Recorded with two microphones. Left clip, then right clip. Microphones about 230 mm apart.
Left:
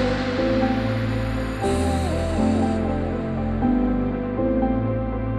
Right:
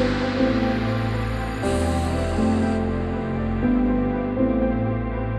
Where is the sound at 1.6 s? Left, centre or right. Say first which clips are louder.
Left 1 dB; right.